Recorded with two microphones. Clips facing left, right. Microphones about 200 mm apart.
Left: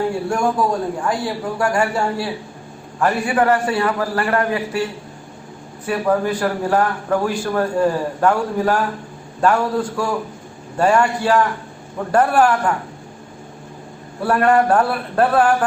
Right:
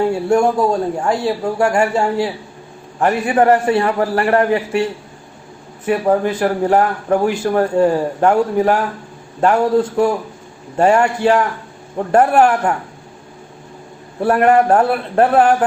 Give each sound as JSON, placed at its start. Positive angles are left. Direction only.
{"t": 0.3, "sound": "a man's voice", "side_deg": -25}
{"t": 5.8, "sound": "a man's voice", "side_deg": -20}
{"t": 14.2, "sound": "a man's voice", "side_deg": -20}